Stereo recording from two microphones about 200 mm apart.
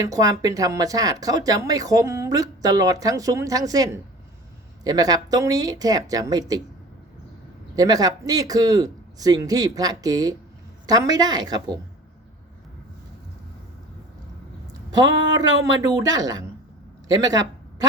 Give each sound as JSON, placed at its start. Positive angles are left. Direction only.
{"t": 0.0, "sound": "speech", "side_deg": -15}
{"t": 7.8, "sound": "speech", "side_deg": -20}
{"t": 14.7, "sound": "speech", "side_deg": -20}
{"t": 17.1, "sound": "a sound", "side_deg": -20}